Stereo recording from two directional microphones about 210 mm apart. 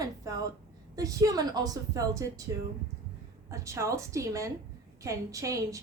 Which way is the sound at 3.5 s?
15° right (ahead or behind).